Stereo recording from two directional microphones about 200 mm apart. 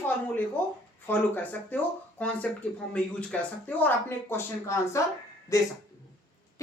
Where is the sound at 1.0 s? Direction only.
10° left (ahead or behind).